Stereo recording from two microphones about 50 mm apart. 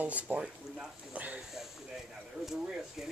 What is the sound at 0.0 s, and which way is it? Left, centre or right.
Speech, right.